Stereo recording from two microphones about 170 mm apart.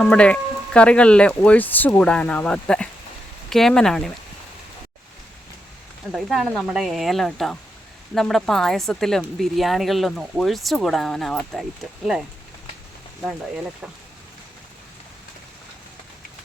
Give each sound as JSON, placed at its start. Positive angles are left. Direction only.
{"t": 0.0, "sound": "a woman's voice", "side_deg": 5}
{"t": 6.1, "sound": "a woman's voice", "side_deg": 0}